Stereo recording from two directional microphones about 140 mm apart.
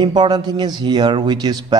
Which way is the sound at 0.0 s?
30° right (ahead or behind).